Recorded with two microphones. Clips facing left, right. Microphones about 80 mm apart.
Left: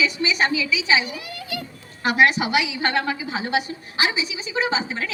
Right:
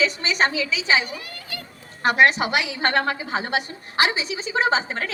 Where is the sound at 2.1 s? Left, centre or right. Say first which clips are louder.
Even; right.